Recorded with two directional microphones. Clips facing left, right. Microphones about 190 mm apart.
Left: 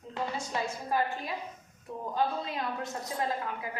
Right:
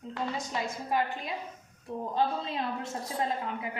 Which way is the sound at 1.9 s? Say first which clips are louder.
Right 4 dB; 25° right (ahead or behind).